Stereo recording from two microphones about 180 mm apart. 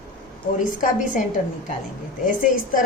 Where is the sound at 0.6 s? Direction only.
45° left (ahead or behind).